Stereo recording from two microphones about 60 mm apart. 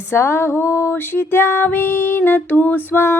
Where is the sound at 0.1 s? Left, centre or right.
Left.